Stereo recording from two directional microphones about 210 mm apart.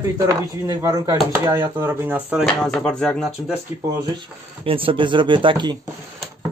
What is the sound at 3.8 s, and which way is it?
Speech, 20° right (ahead or behind).